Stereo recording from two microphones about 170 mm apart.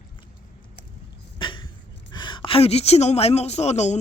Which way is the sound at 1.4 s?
30° left (ahead or behind).